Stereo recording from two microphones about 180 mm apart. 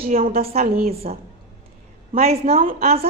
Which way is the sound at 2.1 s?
35° right (ahead or behind).